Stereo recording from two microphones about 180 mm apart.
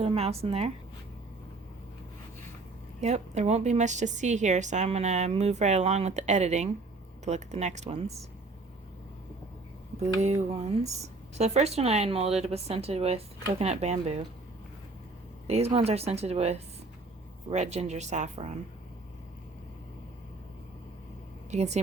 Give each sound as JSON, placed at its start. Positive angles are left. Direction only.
{"t": 0.0, "sound": "a woman's voice", "side_deg": -35}
{"t": 3.0, "sound": "a woman's voice", "side_deg": -40}
{"t": 10.2, "sound": "a woman's voice", "side_deg": -40}
{"t": 15.4, "sound": "a woman's voice", "side_deg": -35}
{"t": 21.5, "sound": "a woman's voice", "side_deg": -40}